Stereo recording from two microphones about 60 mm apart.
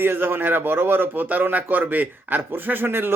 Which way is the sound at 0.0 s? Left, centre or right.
Right.